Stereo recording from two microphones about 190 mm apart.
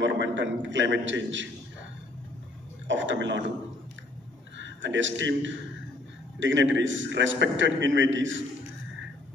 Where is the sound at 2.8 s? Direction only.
75° right (ahead or behind).